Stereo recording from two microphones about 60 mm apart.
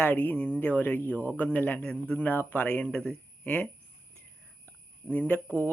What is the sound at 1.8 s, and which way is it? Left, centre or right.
Speech, centre.